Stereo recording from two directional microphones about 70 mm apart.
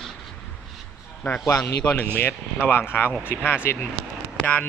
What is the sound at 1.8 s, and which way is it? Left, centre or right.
Speech, left.